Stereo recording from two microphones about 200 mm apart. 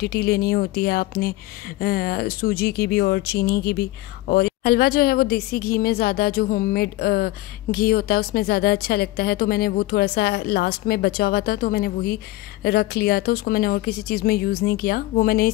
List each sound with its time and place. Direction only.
0.0 s a woman's voice: 50° left (ahead or behind)